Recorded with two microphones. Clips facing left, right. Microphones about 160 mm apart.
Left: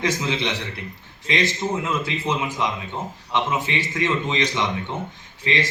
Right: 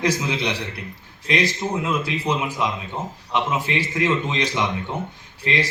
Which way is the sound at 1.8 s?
15° right (ahead or behind).